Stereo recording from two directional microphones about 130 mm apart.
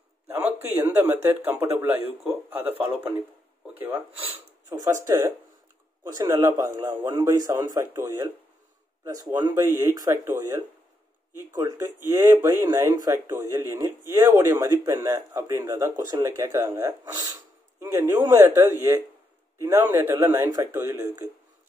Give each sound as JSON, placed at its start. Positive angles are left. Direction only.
{"t": 0.3, "sound": "speech", "side_deg": -15}
{"t": 3.2, "sound": "speech", "side_deg": -15}